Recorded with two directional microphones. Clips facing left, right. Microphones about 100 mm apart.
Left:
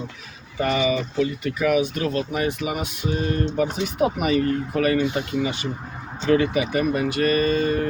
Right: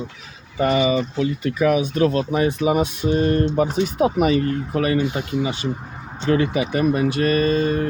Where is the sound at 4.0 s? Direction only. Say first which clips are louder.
Right 2 dB; 35° right (ahead or behind).